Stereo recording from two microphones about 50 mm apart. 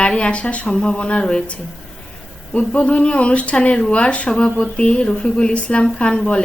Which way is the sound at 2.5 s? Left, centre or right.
Left.